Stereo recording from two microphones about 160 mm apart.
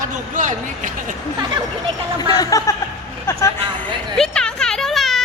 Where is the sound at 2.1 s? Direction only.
25° left (ahead or behind).